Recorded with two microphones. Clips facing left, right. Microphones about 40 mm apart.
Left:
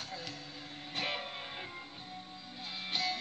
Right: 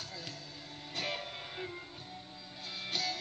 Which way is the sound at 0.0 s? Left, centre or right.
Left.